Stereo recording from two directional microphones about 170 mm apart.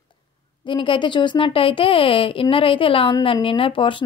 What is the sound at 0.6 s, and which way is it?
Speech, 30° left (ahead or behind).